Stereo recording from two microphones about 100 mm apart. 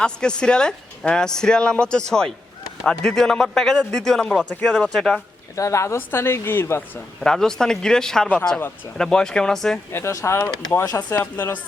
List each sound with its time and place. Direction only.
0.0 s a man's voice: 10° left (ahead or behind)
5.5 s a woman's voice: 30° left (ahead or behind)
7.2 s a man's voice: 5° left (ahead or behind)
9.9 s a woman's voice: 30° left (ahead or behind)